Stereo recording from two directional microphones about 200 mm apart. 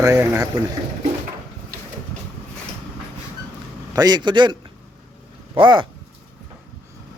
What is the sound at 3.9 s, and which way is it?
Speech, 20° right (ahead or behind).